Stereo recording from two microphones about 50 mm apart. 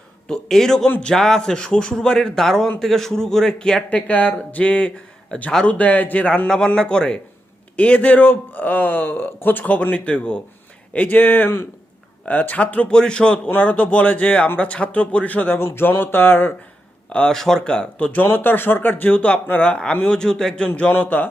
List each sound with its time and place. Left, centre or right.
0.3 s a man's voice: centre
3.8 s speech: left
6.7 s a man's voice: centre
7.8 s speech: left
10.9 s speech: left; by 13.5 s centre
13.6 s speech: left
15.5 s speech: left
17.1 s a man's voice: centre; by 19.0 s left
19.0 s a man's voice: left
20.9 s speech: left